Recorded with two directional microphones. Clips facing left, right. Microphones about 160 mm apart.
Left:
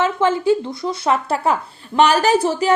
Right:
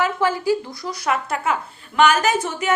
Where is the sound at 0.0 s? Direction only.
25° left (ahead or behind).